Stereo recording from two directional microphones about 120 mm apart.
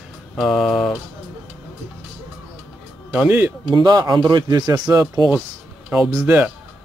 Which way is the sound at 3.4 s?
35° right (ahead or behind).